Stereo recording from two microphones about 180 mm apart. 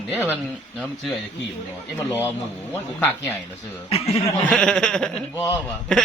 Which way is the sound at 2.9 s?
10° left (ahead or behind).